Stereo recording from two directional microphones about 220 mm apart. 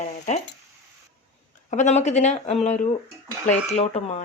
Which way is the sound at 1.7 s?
30° left (ahead or behind).